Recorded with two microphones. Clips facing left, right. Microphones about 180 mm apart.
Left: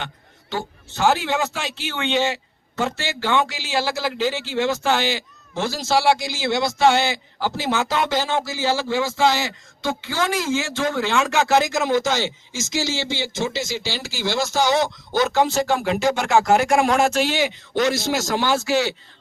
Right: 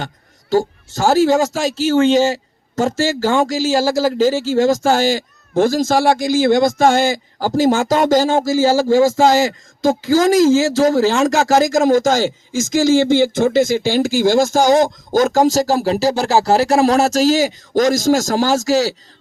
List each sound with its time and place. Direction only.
0.9 s a man's voice: 40° right (ahead or behind)